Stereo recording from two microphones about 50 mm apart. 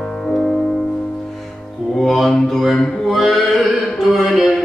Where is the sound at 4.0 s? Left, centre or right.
Centre.